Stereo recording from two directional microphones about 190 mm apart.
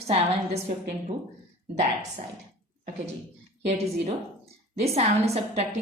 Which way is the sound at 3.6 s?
35° right (ahead or behind).